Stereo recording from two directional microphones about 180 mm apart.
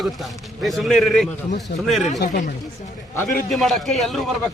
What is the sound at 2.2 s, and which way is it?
Speech, 60° left (ahead or behind).